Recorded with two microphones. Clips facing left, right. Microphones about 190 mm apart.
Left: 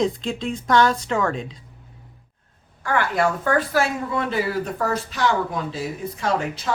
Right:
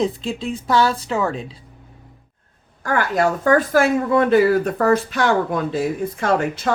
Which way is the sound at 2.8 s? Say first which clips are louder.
Right 2 dB; 45° right (ahead or behind).